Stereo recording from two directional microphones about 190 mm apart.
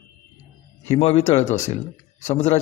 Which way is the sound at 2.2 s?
35° left (ahead or behind).